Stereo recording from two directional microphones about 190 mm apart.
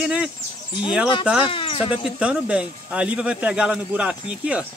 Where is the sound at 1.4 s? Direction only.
25° left (ahead or behind).